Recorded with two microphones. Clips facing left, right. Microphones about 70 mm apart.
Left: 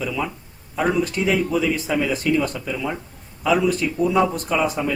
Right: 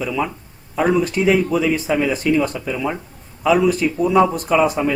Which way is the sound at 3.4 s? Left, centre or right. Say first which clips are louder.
Right 4 dB; centre.